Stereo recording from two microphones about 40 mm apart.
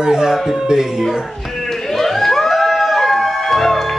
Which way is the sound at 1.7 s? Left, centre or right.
Centre.